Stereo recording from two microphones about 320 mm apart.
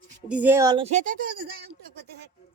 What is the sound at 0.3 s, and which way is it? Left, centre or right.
A woman's voice, centre.